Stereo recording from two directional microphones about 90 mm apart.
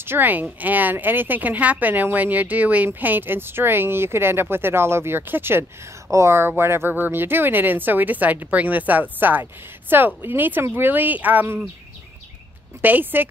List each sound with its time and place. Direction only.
0.0 s speech: 25° right (ahead or behind)
12.8 s speech: 20° right (ahead or behind)